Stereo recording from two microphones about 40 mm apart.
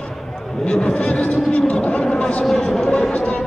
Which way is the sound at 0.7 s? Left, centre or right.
Left.